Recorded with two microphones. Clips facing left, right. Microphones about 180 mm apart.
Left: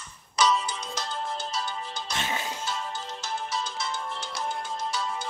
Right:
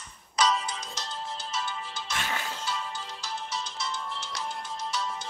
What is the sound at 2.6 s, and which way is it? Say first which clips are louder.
Music: left 1 dB; 45° left (ahead or behind).